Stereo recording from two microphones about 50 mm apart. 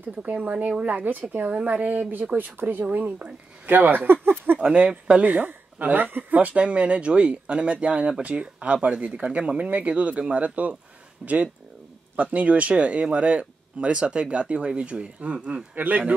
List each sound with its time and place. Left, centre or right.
0.2 s speech: right
3.6 s speech: right
4.6 s speech: right
11.2 s speech: centre
12.2 s speech: right